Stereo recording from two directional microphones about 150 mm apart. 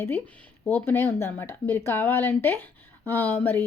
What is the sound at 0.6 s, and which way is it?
A woman's voice, 10° left (ahead or behind).